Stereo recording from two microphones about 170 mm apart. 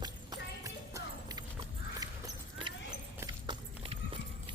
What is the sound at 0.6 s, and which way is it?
Music, 20° right (ahead or behind).